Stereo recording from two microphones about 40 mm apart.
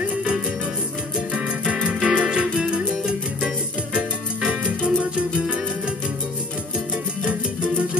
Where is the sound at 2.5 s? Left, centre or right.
Right.